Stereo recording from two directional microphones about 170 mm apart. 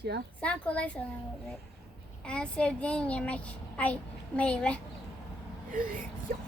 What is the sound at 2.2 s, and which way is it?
A child's voice, 5° left (ahead or behind).